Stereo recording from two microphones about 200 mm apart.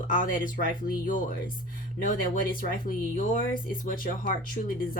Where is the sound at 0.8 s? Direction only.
40° left (ahead or behind).